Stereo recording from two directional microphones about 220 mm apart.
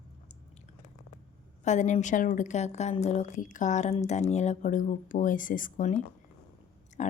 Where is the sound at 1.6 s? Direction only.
30° left (ahead or behind).